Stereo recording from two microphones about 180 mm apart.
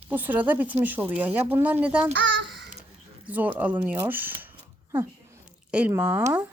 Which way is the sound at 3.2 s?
10° right (ahead or behind).